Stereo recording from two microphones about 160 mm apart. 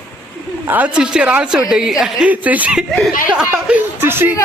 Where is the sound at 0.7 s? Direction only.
10° right (ahead or behind).